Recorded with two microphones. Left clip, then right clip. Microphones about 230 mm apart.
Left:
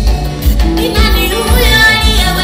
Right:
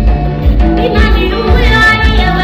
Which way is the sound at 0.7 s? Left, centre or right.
Left.